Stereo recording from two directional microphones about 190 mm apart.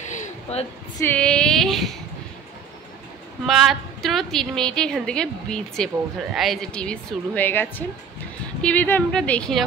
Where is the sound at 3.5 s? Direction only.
Centre (ahead or behind).